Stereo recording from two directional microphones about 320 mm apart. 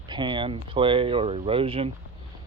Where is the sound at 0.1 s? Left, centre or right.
Centre.